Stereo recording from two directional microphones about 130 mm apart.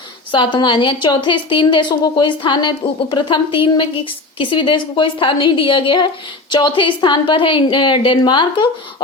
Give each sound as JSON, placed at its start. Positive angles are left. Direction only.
{"t": 0.3, "sound": "a woman's voice", "side_deg": 40}